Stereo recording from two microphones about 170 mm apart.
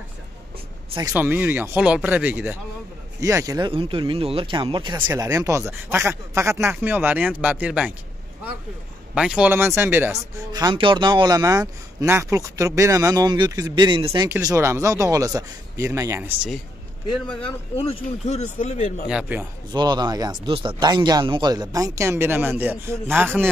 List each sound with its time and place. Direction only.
0.9 s speech: 15° right (ahead or behind)
3.2 s speech: 20° right (ahead or behind)
5.0 s speech: 15° right (ahead or behind)
9.1 s speech: 5° right (ahead or behind)
10.5 s speech: 25° right (ahead or behind)
17.5 s speech: 35° left (ahead or behind)
19.0 s speech: 5° right (ahead or behind)
19.7 s speech: 25° right (ahead or behind)